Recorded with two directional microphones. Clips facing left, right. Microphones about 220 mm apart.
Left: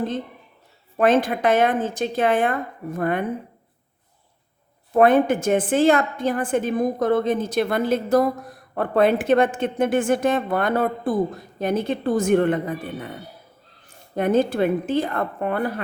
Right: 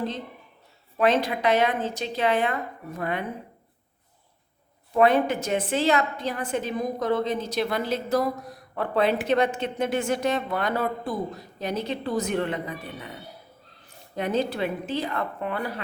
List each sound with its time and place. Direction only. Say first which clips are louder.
0.9 s a woman's voice: left 4 dB; 50° left (ahead or behind)
4.9 s a woman's voice: left 4 dB; 50° left (ahead or behind)